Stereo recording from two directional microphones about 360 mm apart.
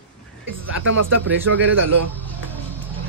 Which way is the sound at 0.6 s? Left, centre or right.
Right.